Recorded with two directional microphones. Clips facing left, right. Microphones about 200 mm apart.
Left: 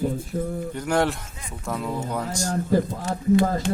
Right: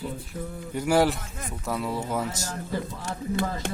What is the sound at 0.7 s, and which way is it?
A man's voice, 10° right (ahead or behind).